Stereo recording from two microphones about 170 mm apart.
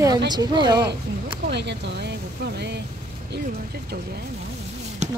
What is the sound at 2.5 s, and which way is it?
Vehicle, 80° right.